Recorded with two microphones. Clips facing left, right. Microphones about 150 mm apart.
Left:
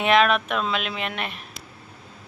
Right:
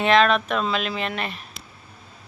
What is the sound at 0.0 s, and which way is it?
Speech, 5° left (ahead or behind).